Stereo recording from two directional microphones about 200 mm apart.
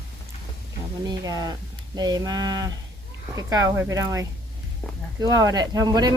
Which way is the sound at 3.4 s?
15° right (ahead or behind).